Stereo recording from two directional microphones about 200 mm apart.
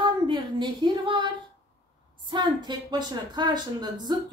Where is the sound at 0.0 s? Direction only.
25° right (ahead or behind).